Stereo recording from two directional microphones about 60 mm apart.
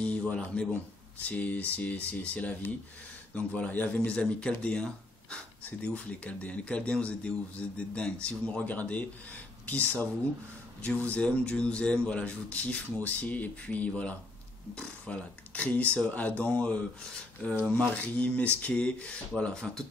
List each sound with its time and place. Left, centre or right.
0.0 s speech: left
17.8 s speech: left